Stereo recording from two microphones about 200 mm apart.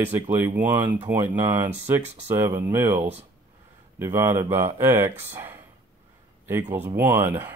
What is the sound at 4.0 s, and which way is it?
Speech, 10° right (ahead or behind).